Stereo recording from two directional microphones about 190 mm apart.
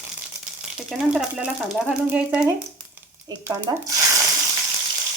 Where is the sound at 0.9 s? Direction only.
5° right (ahead or behind).